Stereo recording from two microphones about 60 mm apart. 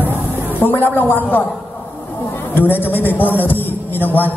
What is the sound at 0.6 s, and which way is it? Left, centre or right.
Speech, left.